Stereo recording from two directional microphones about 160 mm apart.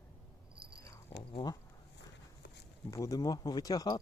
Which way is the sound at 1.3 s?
25° left (ahead or behind).